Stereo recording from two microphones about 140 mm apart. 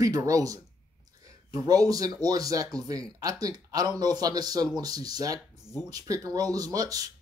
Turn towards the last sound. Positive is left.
turn(degrees=-25)  # may be behind; listen again after turning